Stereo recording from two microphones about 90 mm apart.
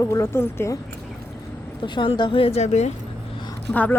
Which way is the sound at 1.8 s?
60° left (ahead or behind).